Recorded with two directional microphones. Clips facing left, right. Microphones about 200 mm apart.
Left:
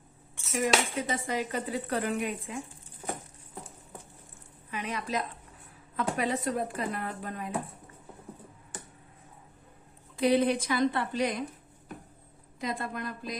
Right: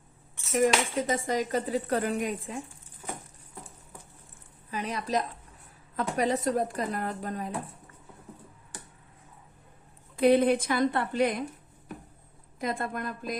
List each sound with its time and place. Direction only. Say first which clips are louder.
0.6 s speech: right 3 dB; 45° right (ahead or behind)
4.7 s speech: right 3 dB; 35° right (ahead or behind)
10.2 s a woman's voice: right 3 dB; 55° right (ahead or behind)
12.5 s a woman's voice: right 2 dB; 50° right (ahead or behind)